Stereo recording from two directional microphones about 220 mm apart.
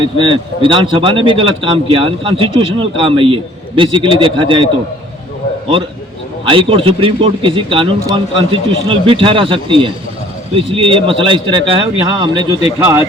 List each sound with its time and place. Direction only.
0.0 s a man's voice: 20° right (ahead or behind)
6.5 s a man's voice: 25° right (ahead or behind)